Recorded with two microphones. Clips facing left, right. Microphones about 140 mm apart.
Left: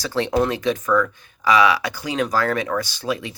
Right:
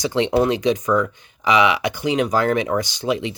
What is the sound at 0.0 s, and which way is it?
Speech, 20° right (ahead or behind).